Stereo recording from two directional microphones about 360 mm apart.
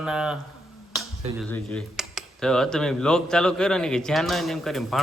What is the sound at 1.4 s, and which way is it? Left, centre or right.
Speech, centre.